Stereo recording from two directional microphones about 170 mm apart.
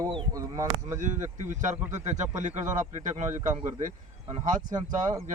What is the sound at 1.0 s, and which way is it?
A man's voice, 45° right (ahead or behind).